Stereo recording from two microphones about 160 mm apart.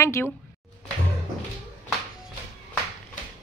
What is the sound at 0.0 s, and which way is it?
Speech, 15° left (ahead or behind).